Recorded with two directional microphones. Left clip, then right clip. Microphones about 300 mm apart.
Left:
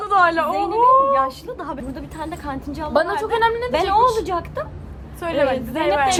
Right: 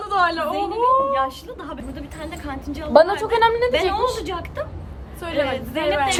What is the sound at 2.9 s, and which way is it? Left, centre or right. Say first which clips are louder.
Speech: right 4 dB; right.